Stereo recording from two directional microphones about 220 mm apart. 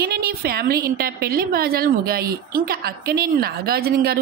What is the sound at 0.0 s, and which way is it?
A woman's voice, 45° right (ahead or behind).